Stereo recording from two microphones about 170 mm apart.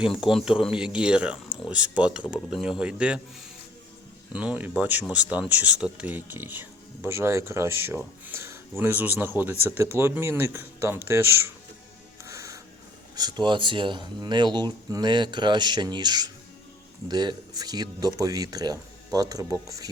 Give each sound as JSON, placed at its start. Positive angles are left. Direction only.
{"t": 0.2, "sound": "speech", "side_deg": 0}
{"t": 4.3, "sound": "speech", "side_deg": -5}
{"t": 12.3, "sound": "music", "side_deg": -15}
{"t": 13.1, "sound": "speech", "side_deg": -25}